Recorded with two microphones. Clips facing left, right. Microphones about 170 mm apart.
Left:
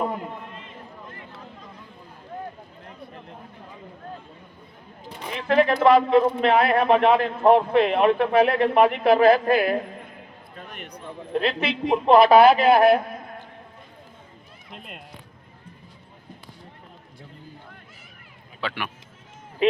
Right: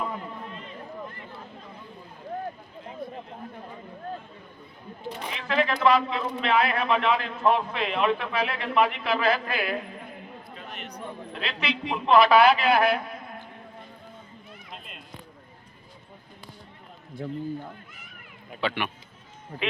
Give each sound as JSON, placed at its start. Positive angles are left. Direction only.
{"t": 5.3, "sound": "a man's voice", "side_deg": 50}
{"t": 18.6, "sound": "speech", "side_deg": 5}